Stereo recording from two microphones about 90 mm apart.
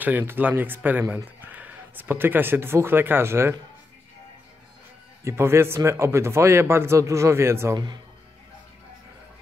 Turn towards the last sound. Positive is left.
turn(degrees=-30)  # may be behind; listen again after turning